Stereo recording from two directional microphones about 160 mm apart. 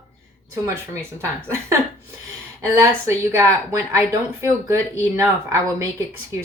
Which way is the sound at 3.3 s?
20° right (ahead or behind).